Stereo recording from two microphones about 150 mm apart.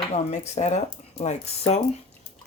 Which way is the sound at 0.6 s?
50° left (ahead or behind).